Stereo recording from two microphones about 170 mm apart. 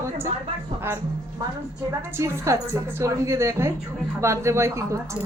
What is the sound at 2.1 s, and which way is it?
Speech, 15° right (ahead or behind).